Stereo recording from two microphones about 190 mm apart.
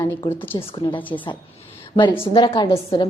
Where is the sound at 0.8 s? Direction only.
25° left (ahead or behind).